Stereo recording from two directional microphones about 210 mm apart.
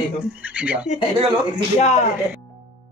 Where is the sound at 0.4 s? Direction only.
5° right (ahead or behind).